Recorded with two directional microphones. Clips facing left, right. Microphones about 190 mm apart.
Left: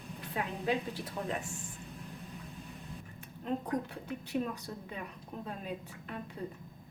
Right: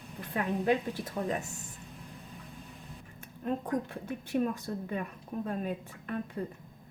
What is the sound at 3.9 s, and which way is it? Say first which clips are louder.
A woman's voice: right 3 dB; 50° right (ahead or behind).